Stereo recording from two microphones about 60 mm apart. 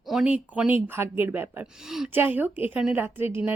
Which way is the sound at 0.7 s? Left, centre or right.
Right.